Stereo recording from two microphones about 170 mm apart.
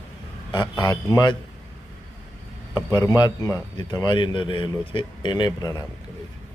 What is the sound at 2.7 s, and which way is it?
Speech, 20° left (ahead or behind).